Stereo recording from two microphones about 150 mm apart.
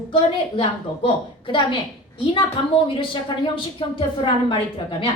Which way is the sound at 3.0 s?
35° left (ahead or behind).